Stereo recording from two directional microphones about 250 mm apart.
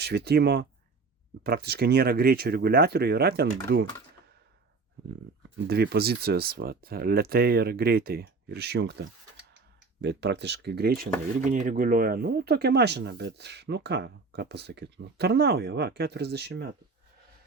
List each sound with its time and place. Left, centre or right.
0.0 s speech: right
5.6 s speech: right